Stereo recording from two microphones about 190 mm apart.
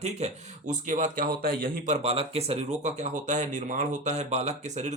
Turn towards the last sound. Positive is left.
turn(degrees=-35)  # may be behind; listen again after turning